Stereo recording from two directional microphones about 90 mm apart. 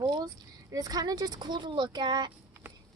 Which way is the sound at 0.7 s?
40° right (ahead or behind).